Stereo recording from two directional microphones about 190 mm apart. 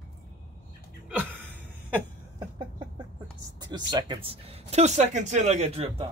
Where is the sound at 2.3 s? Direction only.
20° right (ahead or behind).